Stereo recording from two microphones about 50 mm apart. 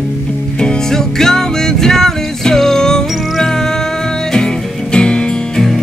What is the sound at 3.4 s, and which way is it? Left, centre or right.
Music, centre.